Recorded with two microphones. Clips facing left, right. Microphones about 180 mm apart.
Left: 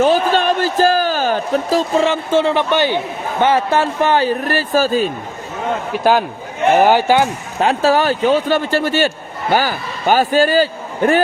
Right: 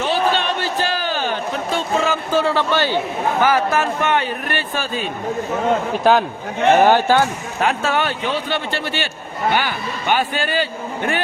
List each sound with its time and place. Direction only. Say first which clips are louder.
0.0 s a sound: left 5 dB; 45° left (ahead or behind); by 3.0 s 15° left (ahead or behind)
3.4 s a man's voice: left 4 dB; 30° left (ahead or behind)
6.0 s a man's voice: left 4 dB; 5° left (ahead or behind)
7.6 s a man's voice: left 5 dB; 35° left (ahead or behind)